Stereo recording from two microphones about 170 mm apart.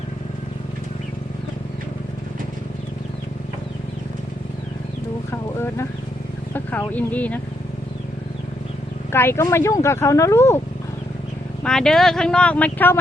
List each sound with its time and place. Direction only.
5.3 s a sound: 15° left (ahead or behind)
6.5 s speech: 10° left (ahead or behind)
9.1 s speech: 15° left (ahead or behind)
11.6 s speech: 5° left (ahead or behind)